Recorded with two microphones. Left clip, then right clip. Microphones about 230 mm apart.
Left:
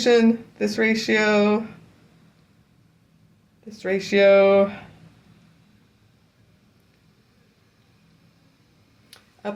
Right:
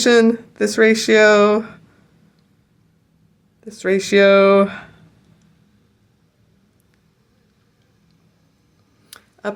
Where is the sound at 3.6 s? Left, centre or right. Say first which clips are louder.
Right 6 dB; right.